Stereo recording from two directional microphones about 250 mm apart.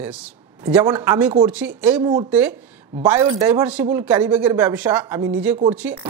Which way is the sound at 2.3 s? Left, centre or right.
Centre.